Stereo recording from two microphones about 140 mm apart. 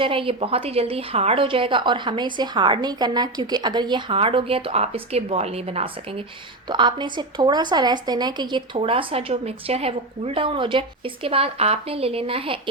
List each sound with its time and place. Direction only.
0.0 s speech: 40° right (ahead or behind)